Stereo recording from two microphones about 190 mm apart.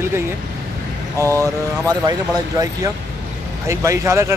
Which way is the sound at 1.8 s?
20° right (ahead or behind).